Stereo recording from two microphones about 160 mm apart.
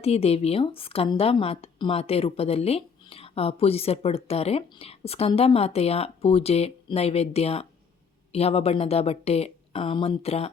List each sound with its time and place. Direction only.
0.0 s a woman's voice: 40° left (ahead or behind)